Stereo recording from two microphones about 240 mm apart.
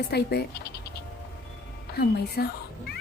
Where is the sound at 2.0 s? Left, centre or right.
Left.